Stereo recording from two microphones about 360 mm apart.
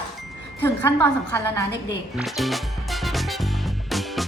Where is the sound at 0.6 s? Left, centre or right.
Centre.